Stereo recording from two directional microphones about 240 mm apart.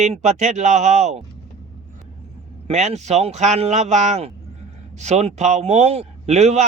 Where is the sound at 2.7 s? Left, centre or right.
Right.